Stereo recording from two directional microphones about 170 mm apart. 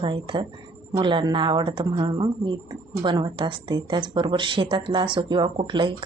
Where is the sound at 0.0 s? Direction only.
30° right (ahead or behind).